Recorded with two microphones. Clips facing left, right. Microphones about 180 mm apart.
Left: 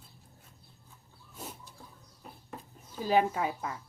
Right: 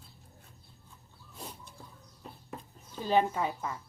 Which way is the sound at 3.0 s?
5° left (ahead or behind).